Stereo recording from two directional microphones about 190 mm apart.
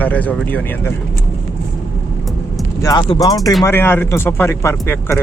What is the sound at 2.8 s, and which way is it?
Speech, 20° left (ahead or behind).